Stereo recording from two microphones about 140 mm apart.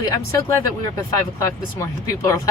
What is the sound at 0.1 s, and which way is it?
Speech, 20° left (ahead or behind).